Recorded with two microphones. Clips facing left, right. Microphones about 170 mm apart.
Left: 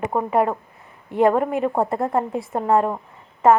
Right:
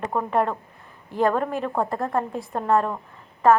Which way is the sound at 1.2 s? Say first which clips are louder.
Left 5 dB; 25° left (ahead or behind).